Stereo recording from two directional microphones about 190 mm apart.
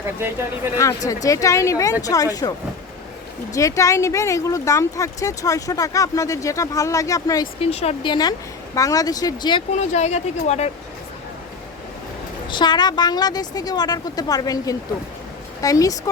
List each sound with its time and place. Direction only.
0.8 s speech: 15° left (ahead or behind)
3.5 s speech: 15° left (ahead or behind)
7.6 s a woman's voice: 35° left (ahead or behind)
9.7 s speech: 35° left (ahead or behind)
12.5 s a woman's voice: 25° left (ahead or behind)